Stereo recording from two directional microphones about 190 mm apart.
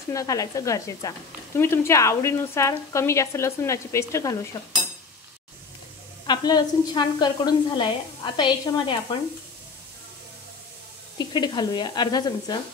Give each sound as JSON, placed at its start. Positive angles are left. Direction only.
{"t": 0.1, "sound": "a woman's voice", "side_deg": 15}
{"t": 6.2, "sound": "a woman's voice", "side_deg": 20}
{"t": 11.1, "sound": "a woman's voice", "side_deg": 20}